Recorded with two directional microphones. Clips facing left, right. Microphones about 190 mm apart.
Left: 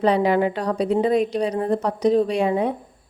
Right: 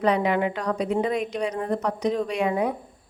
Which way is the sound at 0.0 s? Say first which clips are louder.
Left 4 dB; 30° left (ahead or behind).